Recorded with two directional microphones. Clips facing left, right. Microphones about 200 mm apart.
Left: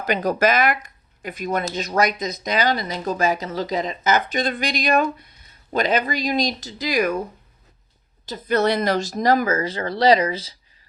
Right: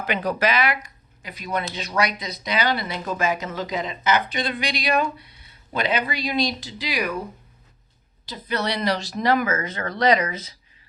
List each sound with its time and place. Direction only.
0.0 s speech: 40° left (ahead or behind)
8.3 s speech: 50° left (ahead or behind); by 10.5 s 30° left (ahead or behind)